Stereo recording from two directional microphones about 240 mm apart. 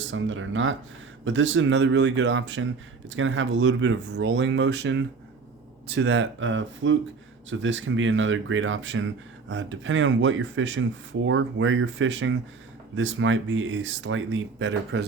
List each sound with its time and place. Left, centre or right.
0.1 s speech: right